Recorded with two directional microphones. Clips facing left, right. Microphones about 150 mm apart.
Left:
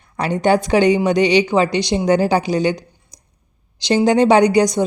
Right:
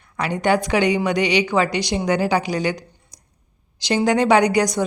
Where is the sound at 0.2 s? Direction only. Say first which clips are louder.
Left 3 dB; 30° left (ahead or behind).